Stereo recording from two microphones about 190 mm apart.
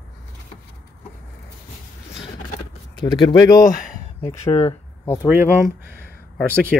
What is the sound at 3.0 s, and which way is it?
Speech, 25° left (ahead or behind).